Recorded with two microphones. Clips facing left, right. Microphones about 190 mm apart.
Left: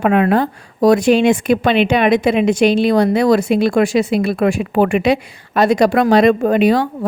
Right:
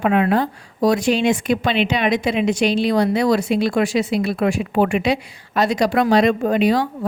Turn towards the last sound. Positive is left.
turn(degrees=55)  # may be behind; listen again after turning